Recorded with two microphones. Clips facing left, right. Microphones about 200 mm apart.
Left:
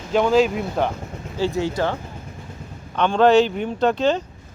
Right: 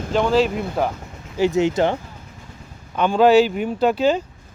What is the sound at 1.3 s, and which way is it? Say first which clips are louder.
Speech: right 4 dB; 15° right (ahead or behind).